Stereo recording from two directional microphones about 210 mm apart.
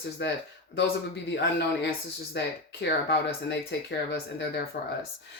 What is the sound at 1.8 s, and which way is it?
Speech, 55° left (ahead or behind).